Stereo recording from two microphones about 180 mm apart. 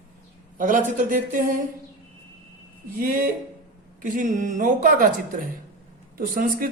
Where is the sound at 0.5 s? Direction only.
45° right (ahead or behind).